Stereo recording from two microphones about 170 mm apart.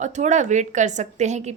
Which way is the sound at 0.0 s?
45° right (ahead or behind).